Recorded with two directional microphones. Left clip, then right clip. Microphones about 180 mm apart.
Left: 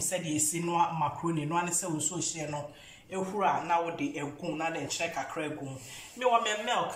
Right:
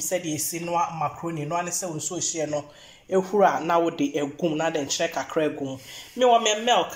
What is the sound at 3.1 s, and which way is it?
A man's voice, 40° right (ahead or behind).